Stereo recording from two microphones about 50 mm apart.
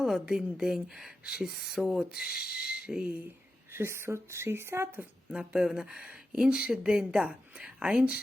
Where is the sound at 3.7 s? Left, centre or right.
Right.